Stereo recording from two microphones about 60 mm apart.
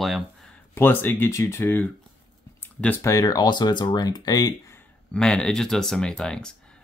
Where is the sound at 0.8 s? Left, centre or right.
Left.